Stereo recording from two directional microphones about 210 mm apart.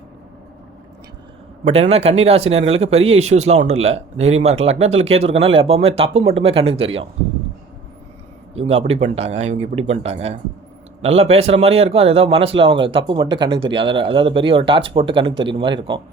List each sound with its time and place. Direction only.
1.6 s speech: 30° right (ahead or behind)
8.5 s speech: 30° right (ahead or behind)